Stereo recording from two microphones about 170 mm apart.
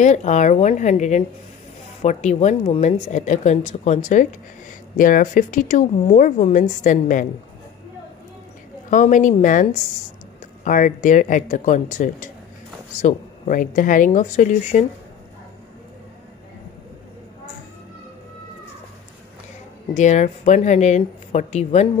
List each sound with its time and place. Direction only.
0.0 s speech: 45° left (ahead or behind)
8.9 s speech: 50° left (ahead or behind)
20.0 s speech: 45° left (ahead or behind)